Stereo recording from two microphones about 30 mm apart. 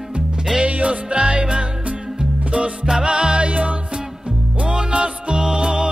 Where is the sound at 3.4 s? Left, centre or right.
Right.